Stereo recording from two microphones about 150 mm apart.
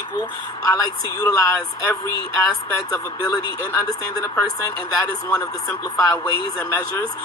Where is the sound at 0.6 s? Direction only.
20° left (ahead or behind).